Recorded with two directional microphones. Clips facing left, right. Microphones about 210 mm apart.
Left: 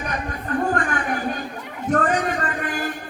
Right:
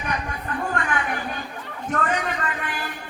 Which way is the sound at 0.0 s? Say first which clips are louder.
Left 1 dB; 40° left (ahead or behind).